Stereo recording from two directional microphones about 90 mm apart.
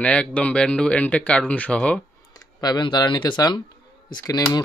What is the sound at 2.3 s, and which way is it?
Speech, 50° left (ahead or behind).